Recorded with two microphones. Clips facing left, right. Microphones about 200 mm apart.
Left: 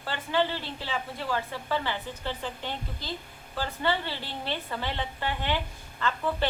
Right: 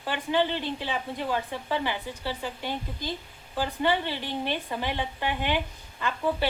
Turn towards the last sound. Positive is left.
turn(degrees=-15)  # may be behind; listen again after turning